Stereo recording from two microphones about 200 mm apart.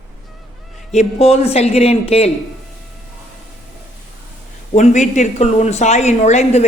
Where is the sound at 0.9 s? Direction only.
30° left (ahead or behind).